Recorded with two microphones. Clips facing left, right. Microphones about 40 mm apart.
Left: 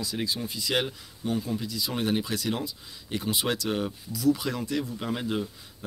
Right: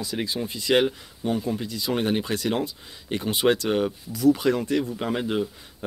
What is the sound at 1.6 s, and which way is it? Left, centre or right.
Speech, right.